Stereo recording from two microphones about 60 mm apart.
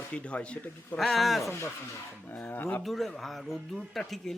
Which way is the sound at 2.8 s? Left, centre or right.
Centre.